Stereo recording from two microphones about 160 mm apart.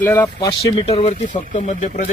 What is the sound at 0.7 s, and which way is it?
Speech, 40° left (ahead or behind).